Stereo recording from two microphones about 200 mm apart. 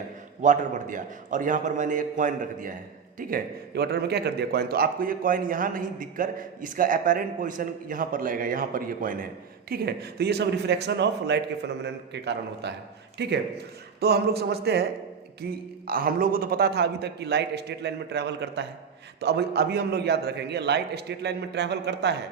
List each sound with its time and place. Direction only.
0.4 s a man's voice: 40° right (ahead or behind); by 22.1 s 55° right (ahead or behind)